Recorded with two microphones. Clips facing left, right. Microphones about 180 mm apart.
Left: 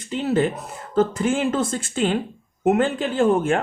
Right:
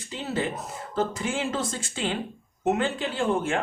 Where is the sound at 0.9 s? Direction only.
50° left (ahead or behind).